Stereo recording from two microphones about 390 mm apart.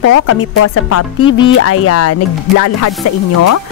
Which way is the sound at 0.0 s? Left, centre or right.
Left.